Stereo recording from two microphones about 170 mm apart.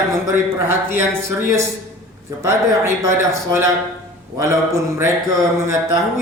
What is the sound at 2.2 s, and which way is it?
A man's voice, 15° right (ahead or behind).